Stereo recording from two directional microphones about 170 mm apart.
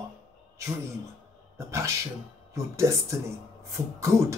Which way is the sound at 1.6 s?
15° right (ahead or behind).